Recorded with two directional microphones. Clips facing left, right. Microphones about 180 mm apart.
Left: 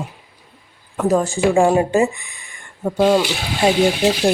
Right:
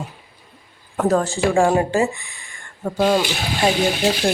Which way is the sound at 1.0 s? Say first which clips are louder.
Left 2 dB; 10° left (ahead or behind).